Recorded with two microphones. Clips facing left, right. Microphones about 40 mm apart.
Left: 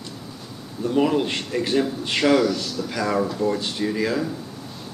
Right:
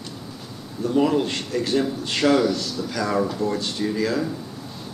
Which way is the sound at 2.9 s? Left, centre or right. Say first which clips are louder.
Even; centre.